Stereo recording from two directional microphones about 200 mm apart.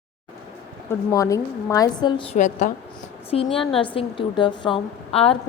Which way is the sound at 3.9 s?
25° left (ahead or behind).